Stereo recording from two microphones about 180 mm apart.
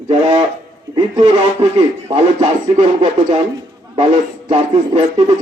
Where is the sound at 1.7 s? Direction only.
35° right (ahead or behind).